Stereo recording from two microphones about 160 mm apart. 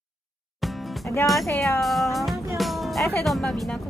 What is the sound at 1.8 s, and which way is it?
Speech, centre (ahead or behind).